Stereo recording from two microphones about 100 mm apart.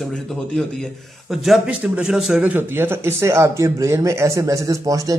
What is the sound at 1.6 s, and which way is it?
A man's voice, 10° right (ahead or behind).